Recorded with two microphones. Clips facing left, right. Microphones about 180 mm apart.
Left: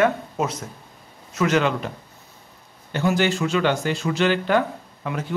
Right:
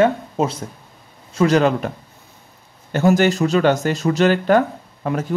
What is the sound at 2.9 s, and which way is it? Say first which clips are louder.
Speech: right 6 dB; 45° right (ahead or behind).